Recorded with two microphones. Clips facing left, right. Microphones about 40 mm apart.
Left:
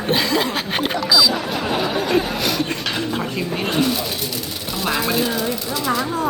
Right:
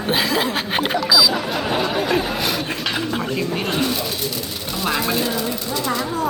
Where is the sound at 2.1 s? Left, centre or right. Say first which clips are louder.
Left 1 dB; centre.